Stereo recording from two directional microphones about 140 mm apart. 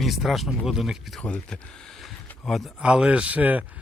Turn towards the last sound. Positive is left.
turn(degrees=-10)  # may be behind; listen again after turning